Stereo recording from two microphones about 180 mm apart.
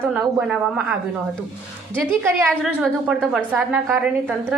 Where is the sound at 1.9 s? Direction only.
10° right (ahead or behind).